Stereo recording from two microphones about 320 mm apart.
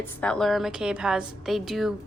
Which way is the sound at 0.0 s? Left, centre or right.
Centre.